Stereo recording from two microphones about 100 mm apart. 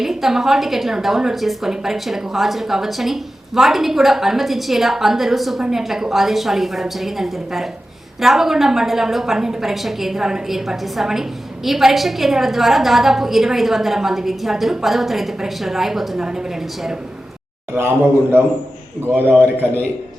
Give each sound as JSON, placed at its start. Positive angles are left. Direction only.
{"t": 0.0, "sound": "a woman's voice", "side_deg": -5}
{"t": 17.7, "sound": "a man's voice", "side_deg": -25}